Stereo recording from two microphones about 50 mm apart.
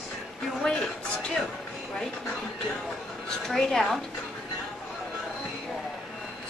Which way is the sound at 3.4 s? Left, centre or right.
Centre.